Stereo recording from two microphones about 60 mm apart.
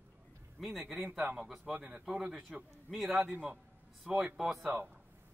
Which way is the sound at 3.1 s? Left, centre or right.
Right.